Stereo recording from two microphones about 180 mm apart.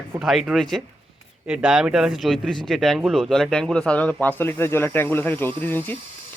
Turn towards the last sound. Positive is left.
turn(degrees=10)  # may be behind; listen again after turning